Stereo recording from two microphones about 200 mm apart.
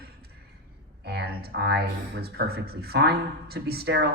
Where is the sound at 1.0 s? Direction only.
55° right (ahead or behind).